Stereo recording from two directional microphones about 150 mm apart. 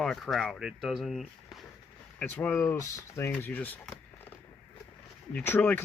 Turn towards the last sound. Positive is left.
turn(degrees=15)  # may be behind; listen again after turning